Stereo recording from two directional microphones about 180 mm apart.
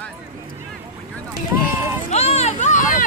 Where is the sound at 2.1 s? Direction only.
35° left (ahead or behind).